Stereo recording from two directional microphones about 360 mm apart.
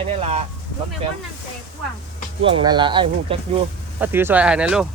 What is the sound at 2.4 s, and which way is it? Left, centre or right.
Speech, centre.